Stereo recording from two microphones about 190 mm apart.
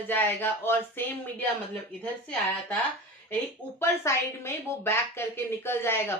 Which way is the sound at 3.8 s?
15° left (ahead or behind).